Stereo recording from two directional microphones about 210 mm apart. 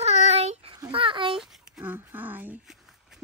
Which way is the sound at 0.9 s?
25° right (ahead or behind).